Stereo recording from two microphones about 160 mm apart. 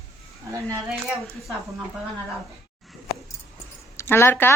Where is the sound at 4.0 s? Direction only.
15° left (ahead or behind).